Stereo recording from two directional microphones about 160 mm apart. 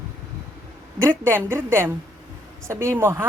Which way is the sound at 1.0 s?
15° right (ahead or behind).